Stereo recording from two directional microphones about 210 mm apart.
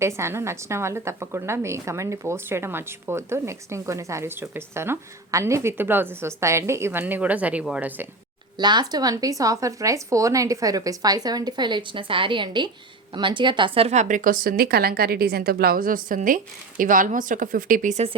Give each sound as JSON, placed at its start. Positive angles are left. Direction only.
{"t": 0.0, "sound": "a woman's voice", "side_deg": -15}
{"t": 8.5, "sound": "a woman's voice", "side_deg": -20}